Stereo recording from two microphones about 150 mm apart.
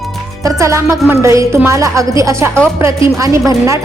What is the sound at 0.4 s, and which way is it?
Speech, 20° right (ahead or behind).